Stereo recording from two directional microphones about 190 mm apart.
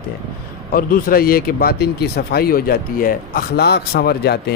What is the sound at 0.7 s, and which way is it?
Speech, 50° left (ahead or behind).